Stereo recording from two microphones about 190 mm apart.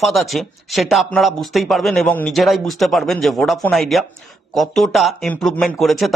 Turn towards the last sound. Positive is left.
turn(degrees=0)  # may be behind; listen again after turning